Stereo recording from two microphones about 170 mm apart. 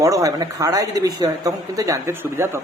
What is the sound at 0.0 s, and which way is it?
Speech, 20° right (ahead or behind).